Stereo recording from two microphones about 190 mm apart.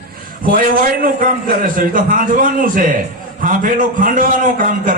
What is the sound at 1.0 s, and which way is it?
A man's voice, 45° right (ahead or behind).